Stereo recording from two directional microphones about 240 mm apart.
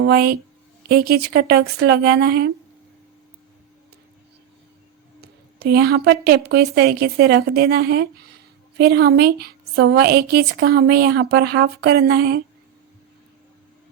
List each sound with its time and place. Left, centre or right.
0.0 s a woman's voice: right
5.2 s a woman's voice: right